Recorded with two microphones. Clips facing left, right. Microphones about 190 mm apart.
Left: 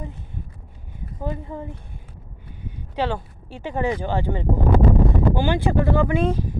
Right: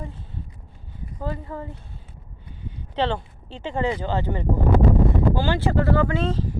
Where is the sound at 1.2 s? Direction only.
15° left (ahead or behind).